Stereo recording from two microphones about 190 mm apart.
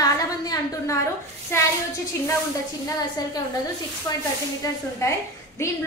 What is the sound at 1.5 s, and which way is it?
Speech, 15° left (ahead or behind).